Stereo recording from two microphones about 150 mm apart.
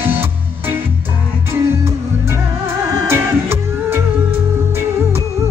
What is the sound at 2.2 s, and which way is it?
Music, 15° right (ahead or behind).